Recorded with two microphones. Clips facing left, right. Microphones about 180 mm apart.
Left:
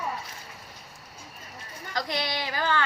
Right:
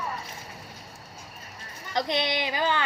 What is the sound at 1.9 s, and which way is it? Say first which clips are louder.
Speech: right 4 dB; 20° right (ahead or behind).